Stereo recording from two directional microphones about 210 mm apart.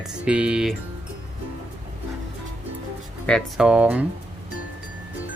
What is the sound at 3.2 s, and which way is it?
Speech, centre (ahead or behind).